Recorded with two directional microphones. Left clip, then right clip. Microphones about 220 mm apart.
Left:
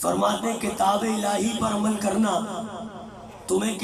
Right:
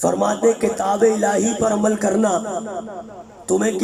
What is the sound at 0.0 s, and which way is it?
Speech, 35° right (ahead or behind).